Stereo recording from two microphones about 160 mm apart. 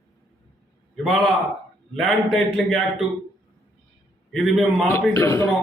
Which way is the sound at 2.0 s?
Centre (ahead or behind).